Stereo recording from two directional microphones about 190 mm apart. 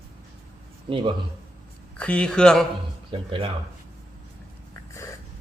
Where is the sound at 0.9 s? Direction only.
25° right (ahead or behind).